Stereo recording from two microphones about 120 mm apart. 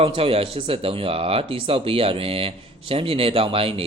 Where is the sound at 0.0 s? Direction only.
50° right (ahead or behind).